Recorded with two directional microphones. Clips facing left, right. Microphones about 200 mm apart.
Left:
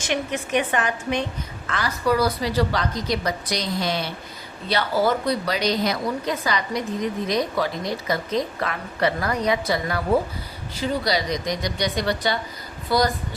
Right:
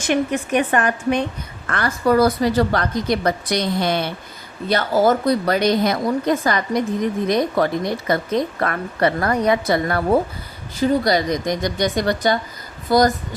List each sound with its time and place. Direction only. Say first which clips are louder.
0.1 s speech: right 5 dB; 50° right (ahead or behind)
4.7 s a woman's voice: right 5 dB; 45° right (ahead or behind)